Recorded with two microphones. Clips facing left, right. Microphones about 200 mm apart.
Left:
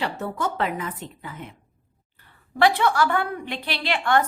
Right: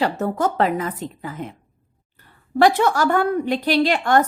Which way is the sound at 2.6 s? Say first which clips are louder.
Right 3 dB; 45° right (ahead or behind).